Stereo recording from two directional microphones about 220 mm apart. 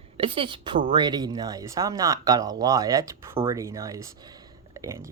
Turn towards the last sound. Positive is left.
turn(degrees=-10)  # may be behind; listen again after turning